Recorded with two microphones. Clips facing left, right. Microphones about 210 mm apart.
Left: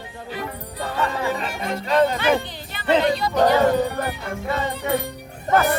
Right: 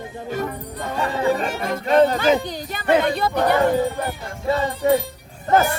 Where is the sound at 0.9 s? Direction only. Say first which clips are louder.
Right 4 dB; 40° right (ahead or behind); by 3.6 s 55° right (ahead or behind).